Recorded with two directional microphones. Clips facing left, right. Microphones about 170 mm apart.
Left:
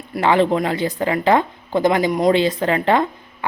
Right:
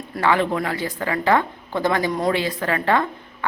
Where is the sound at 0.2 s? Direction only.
25° left (ahead or behind).